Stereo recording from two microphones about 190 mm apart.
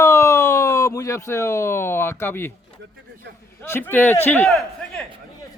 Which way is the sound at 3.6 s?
10° left (ahead or behind).